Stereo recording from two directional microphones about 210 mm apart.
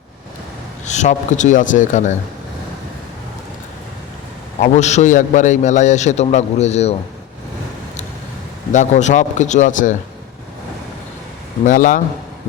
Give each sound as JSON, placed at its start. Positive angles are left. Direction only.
{"t": 0.9, "sound": "a man's voice", "side_deg": 35}
{"t": 4.6, "sound": "a man's voice", "side_deg": 35}
{"t": 8.7, "sound": "a man's voice", "side_deg": 35}
{"t": 11.6, "sound": "a man's voice", "side_deg": 40}